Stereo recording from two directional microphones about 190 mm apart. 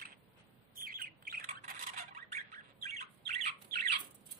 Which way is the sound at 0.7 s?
50° right (ahead or behind).